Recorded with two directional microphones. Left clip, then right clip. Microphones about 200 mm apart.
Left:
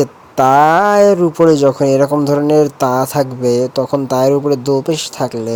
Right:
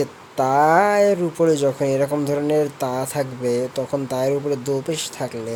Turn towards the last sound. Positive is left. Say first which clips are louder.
# left 8 dB
turn(degrees=30)  # may be behind; listen again after turning